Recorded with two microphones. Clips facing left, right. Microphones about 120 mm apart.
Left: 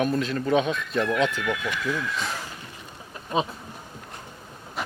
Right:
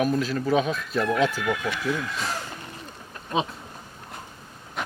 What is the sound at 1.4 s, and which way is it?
Speech, 40° right (ahead or behind).